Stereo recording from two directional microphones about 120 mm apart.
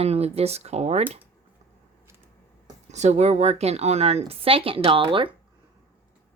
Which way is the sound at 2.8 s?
70° right (ahead or behind).